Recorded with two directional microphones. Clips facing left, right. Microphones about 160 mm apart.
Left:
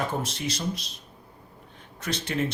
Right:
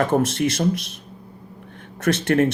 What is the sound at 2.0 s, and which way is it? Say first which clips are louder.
Speech: right 10 dB; 60° right (ahead or behind).